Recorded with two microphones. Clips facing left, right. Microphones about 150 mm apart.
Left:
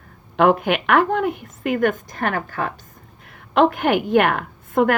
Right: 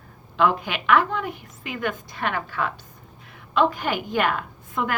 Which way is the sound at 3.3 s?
55° left (ahead or behind).